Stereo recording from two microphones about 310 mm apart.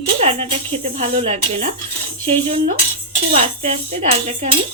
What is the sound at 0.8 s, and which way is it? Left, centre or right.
Speech, centre.